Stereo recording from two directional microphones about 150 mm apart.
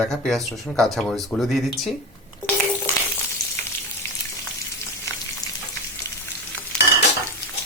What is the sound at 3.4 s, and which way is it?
Frying, 90° left.